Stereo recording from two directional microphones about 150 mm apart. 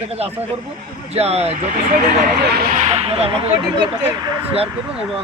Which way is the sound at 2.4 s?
90° right.